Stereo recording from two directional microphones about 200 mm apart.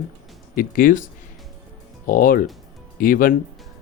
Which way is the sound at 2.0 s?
45° left (ahead or behind).